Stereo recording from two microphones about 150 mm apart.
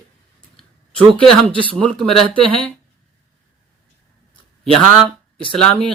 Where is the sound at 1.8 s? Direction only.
10° left (ahead or behind).